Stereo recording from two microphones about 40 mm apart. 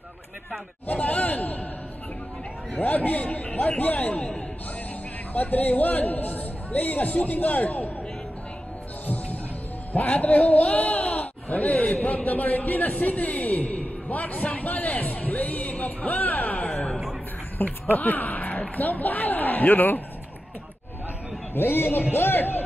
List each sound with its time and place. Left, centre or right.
0.8 s sigh: left
2.8 s a man's voice: left
5.3 s a man's voice: left
9.0 s music: left
9.9 s a man's voice: left
17.6 s a sound: left
18.8 s a man's voice: left
21.5 s a man's voice: left